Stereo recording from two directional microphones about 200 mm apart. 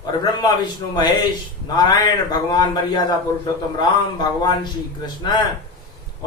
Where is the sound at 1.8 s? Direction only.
20° left (ahead or behind).